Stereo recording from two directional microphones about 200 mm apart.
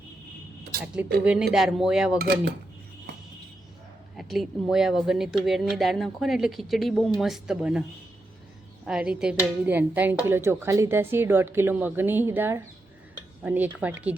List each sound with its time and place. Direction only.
1.2 s speech: 5° right (ahead or behind)
4.2 s speech: centre (ahead or behind)